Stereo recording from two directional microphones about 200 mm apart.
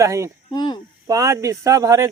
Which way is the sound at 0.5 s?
20° left (ahead or behind).